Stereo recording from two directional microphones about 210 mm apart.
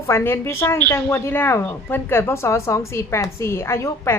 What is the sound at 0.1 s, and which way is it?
A woman's voice, 10° left (ahead or behind).